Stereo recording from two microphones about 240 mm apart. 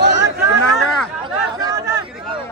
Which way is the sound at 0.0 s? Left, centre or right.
Right.